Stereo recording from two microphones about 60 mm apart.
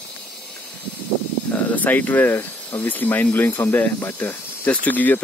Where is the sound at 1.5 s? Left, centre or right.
Left.